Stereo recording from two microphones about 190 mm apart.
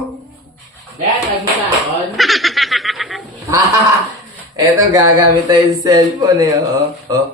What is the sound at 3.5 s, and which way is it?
Speech, 15° right (ahead or behind).